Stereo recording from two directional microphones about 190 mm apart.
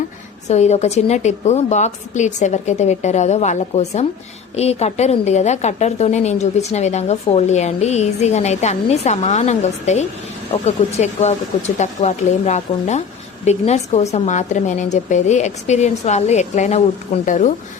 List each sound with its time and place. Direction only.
0.4 s a woman's voice: 35° left (ahead or behind)